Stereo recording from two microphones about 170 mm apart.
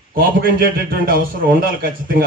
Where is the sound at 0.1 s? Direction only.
60° right (ahead or behind).